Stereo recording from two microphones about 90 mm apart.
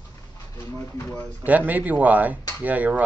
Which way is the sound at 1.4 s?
20° right (ahead or behind).